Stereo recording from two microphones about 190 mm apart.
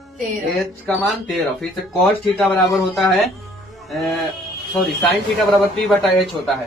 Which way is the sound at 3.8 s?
Centre (ahead or behind).